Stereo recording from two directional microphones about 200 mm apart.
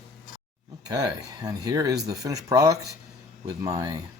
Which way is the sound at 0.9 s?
20° right (ahead or behind).